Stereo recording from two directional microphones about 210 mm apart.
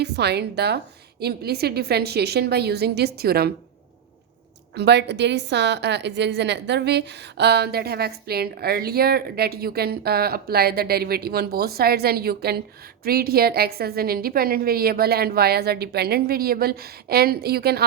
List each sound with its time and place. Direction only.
0.0 s a woman's voice: 50° right (ahead or behind)
4.7 s a woman's voice: 50° right (ahead or behind)